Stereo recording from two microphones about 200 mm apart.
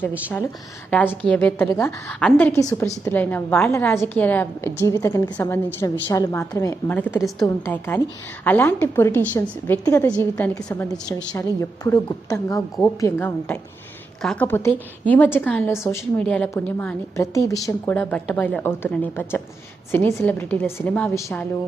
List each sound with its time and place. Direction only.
0.9 s a woman's voice: 10° left (ahead or behind)